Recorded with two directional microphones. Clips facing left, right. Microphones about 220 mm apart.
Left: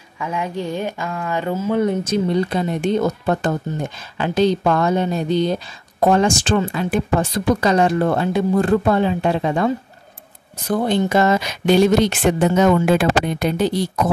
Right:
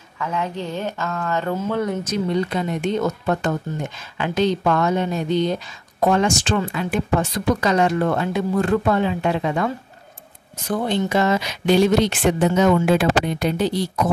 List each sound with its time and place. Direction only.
0.2 s speech: 10° left (ahead or behind)
1.8 s speech: 25° left (ahead or behind)
10.7 s speech: 45° left (ahead or behind)